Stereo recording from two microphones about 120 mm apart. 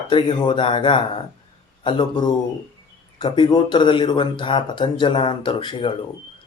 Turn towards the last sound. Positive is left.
turn(degrees=45)  # may be behind; listen again after turning